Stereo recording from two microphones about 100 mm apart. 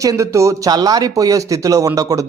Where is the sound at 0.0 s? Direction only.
35° right (ahead or behind).